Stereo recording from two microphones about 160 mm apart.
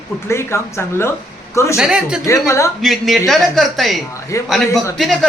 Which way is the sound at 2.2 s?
20° left (ahead or behind).